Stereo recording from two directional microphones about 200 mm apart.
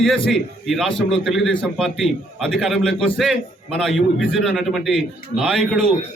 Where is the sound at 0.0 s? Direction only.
Centre (ahead or behind).